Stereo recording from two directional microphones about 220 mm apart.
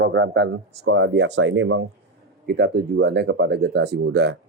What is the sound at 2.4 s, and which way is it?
Speech, 45° right (ahead or behind).